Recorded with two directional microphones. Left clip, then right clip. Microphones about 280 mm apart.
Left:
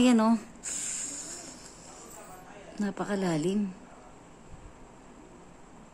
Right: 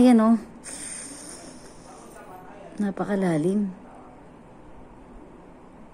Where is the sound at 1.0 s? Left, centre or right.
Centre.